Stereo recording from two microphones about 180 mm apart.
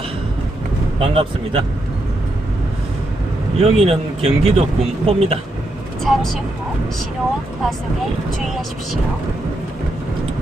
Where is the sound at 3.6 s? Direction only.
35° right (ahead or behind).